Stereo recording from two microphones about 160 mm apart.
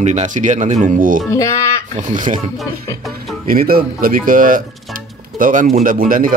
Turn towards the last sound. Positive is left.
turn(degrees=-60)  # may be behind; listen again after turning